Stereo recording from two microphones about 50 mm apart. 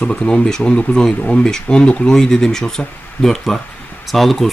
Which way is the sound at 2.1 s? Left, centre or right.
Centre.